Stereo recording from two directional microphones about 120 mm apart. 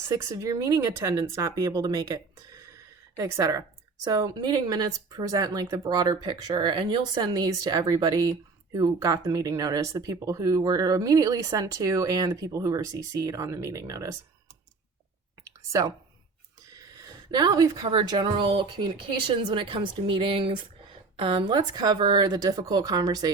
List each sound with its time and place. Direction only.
0.1 s speech: 30° right (ahead or behind)
16.7 s speech: 30° right (ahead or behind)